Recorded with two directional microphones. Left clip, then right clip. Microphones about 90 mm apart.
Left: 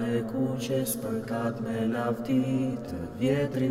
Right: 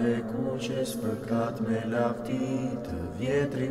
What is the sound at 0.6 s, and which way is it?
Mantra, 45° left (ahead or behind).